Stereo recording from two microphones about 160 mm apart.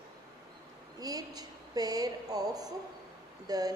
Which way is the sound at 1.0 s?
25° right (ahead or behind).